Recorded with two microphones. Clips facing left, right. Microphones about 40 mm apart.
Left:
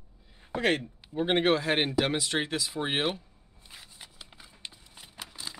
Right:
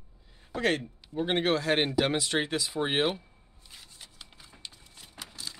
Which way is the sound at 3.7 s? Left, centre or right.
Centre.